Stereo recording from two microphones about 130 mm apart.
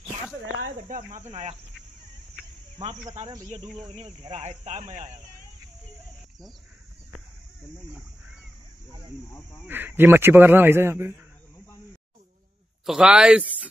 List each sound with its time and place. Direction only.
0.8 s speech: 80° right
1.3 s speech: 50° right (ahead or behind)
4.3 s speech: 60° right (ahead or behind)
9.7 s speech: 15° right (ahead or behind)
12.8 s speech: 5° right (ahead or behind)